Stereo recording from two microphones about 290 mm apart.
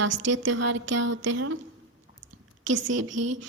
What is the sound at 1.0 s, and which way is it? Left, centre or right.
Speech, right.